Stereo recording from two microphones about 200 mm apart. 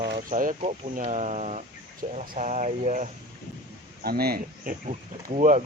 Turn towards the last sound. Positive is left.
turn(degrees=-40)  # may be behind; listen again after turning